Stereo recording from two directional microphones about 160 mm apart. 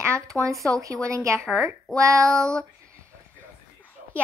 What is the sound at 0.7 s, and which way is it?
Female singing, 20° right (ahead or behind).